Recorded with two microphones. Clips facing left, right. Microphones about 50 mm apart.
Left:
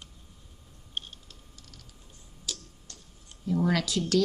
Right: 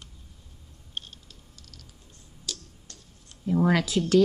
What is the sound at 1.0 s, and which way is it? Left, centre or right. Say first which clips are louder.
Typing: left 1 dB; centre.